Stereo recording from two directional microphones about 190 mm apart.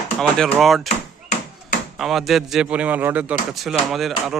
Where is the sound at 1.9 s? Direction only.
Centre (ahead or behind).